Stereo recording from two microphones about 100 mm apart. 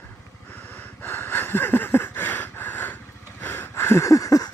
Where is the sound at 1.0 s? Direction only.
25° left (ahead or behind).